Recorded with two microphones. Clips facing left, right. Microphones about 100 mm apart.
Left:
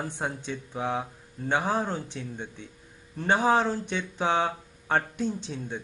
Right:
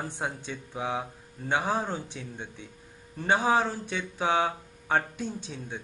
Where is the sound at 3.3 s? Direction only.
15° left (ahead or behind).